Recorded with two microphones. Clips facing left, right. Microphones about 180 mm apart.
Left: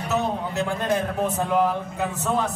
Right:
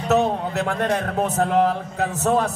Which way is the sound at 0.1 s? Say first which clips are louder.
Right 6 dB; 70° right (ahead or behind).